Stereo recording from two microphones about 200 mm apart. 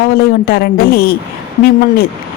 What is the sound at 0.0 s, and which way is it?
Speech, 50° left (ahead or behind).